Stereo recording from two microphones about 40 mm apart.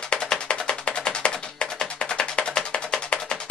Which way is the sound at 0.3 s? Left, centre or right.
Left.